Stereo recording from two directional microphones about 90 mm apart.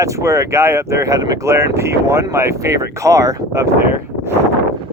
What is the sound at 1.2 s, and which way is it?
Speech, 45° right (ahead or behind).